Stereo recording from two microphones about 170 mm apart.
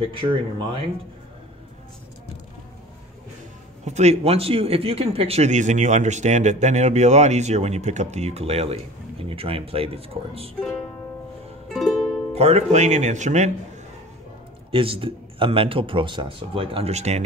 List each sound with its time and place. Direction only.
0.0 s a man's voice: 30° right (ahead or behind)
3.8 s a man's voice: 40° right (ahead or behind)
11.7 s music: centre (ahead or behind)
12.4 s speech: 35° right (ahead or behind)
14.7 s a man's voice: 30° right (ahead or behind)